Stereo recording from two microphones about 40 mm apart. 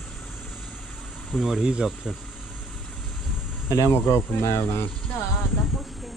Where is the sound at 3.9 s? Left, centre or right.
Left.